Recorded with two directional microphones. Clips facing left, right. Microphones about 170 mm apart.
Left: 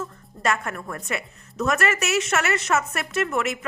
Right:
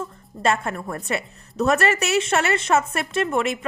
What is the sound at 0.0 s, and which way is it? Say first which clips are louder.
A woman's voice: right 3 dB; 30° right (ahead or behind).